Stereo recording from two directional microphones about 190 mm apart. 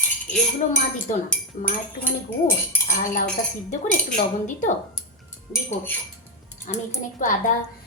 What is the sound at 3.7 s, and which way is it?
Cutlery, 40° left (ahead or behind).